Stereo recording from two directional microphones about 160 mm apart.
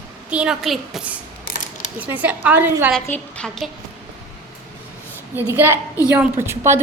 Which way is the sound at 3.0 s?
10° left (ahead or behind).